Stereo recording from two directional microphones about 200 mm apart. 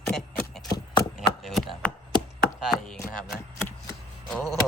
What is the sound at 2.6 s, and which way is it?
Chop, centre (ahead or behind).